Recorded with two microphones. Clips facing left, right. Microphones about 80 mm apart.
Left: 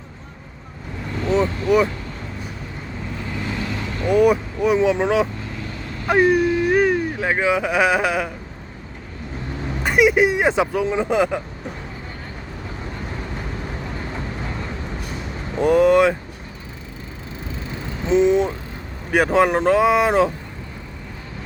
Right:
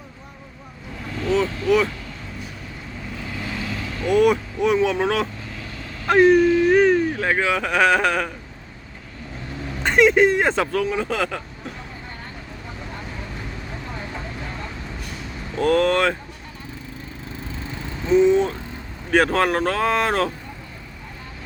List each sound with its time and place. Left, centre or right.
1.2 s vehicle: centre
4.0 s speech: centre
9.8 s speech: centre
15.5 s speech: centre
18.0 s speech: left